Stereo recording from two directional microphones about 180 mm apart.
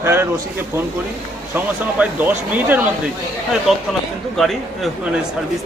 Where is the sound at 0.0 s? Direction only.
15° right (ahead or behind).